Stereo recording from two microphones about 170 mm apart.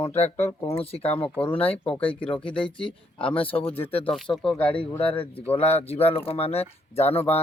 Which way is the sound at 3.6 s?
10° left (ahead or behind).